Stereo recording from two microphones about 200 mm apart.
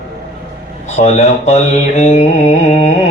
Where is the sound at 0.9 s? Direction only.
35° left (ahead or behind).